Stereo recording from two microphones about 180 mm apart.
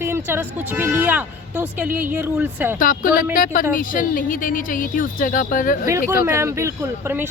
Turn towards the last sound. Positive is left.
turn(degrees=-15)  # may be behind; listen again after turning